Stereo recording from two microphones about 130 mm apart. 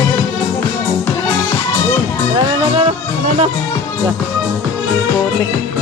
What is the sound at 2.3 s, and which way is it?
Speech, 40° right (ahead or behind).